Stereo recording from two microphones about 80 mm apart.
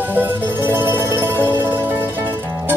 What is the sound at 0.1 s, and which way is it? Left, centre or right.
Music, right.